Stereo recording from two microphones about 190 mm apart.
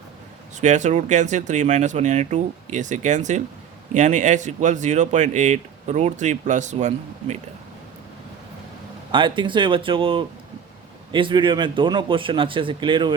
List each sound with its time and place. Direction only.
0.5 s speech: 40° right (ahead or behind)
9.1 s speech: 25° right (ahead or behind)